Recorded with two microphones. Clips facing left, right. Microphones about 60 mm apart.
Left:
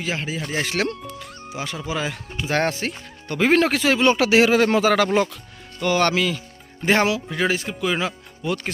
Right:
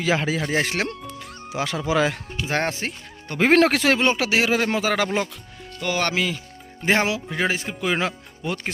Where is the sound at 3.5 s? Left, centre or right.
Right.